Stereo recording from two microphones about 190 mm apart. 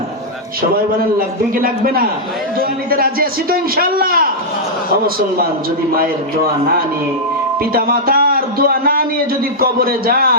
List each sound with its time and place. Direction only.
1.6 s a man's voice: 50° right (ahead or behind)
7.7 s a man's voice: 50° right (ahead or behind)